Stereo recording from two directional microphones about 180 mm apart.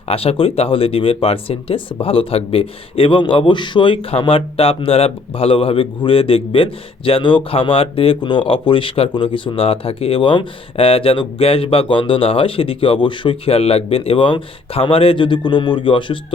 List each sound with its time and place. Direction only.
0.1 s speech: 35° left (ahead or behind)